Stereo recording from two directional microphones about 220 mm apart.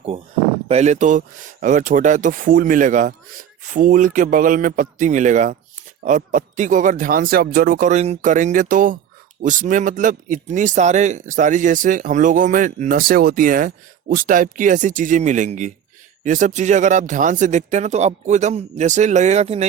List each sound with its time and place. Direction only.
0.7 s a man's voice: 30° right (ahead or behind)